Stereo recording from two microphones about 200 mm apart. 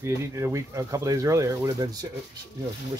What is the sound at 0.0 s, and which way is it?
Speech, 15° right (ahead or behind).